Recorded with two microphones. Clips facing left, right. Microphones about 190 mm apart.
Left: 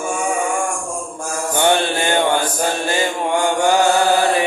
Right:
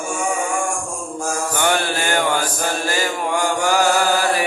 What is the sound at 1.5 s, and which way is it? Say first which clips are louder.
Mantra: left 5 dB; 25° left (ahead or behind).